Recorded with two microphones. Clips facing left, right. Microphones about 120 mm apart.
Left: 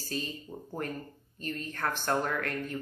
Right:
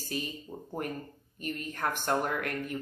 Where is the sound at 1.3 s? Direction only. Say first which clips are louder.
Right 1 dB; 15° right (ahead or behind).